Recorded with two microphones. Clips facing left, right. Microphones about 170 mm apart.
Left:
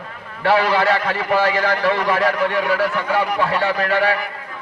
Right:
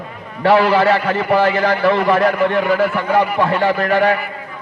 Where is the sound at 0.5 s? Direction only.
45° right (ahead or behind).